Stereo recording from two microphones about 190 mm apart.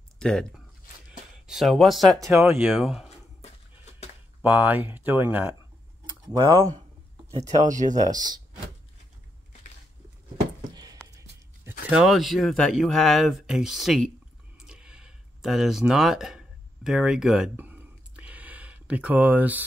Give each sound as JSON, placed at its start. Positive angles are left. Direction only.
{"t": 0.2, "sound": "speech", "side_deg": 5}
{"t": 1.5, "sound": "speech", "side_deg": 0}
{"t": 4.4, "sound": "speech", "side_deg": -10}
{"t": 7.7, "sound": "speech", "side_deg": -40}
{"t": 8.0, "sound": "speech", "side_deg": -20}
{"t": 11.9, "sound": "speech", "side_deg": 0}
{"t": 14.6, "sound": "a sound", "side_deg": -5}